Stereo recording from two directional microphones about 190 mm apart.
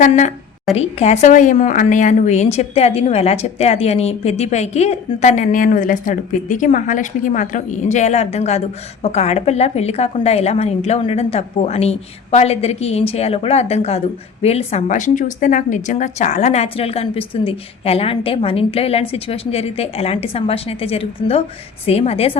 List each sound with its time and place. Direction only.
0.0 s a woman's voice: 40° left (ahead or behind)